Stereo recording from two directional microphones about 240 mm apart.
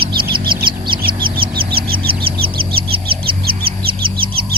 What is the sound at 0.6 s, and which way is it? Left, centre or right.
Bird, centre.